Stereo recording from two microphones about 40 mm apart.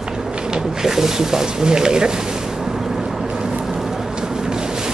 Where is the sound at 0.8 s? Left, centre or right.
Centre.